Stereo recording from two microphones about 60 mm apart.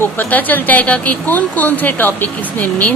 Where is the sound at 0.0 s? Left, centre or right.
Left.